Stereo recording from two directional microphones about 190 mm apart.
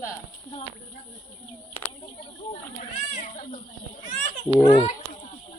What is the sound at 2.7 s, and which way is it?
Speech, 35° left (ahead or behind).